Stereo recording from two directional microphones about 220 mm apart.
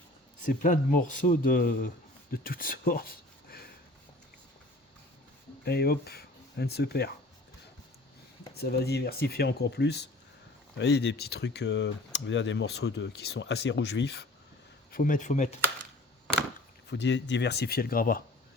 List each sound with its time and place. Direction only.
0.4 s speech: 35° left (ahead or behind)
5.6 s speech: 45° left (ahead or behind)
8.5 s speech: 45° left (ahead or behind)
14.9 s speech: 40° left (ahead or behind)
16.9 s speech: 50° left (ahead or behind)